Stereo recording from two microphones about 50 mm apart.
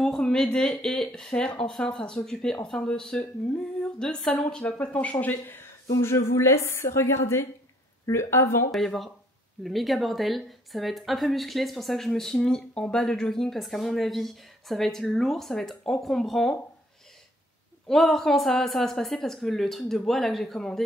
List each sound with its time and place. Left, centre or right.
0.0 s a woman's voice: centre
4.6 s speech: left
5.1 s speech: left
5.9 s a woman's voice: left
8.7 s a woman's voice: centre
17.8 s a woman's voice: centre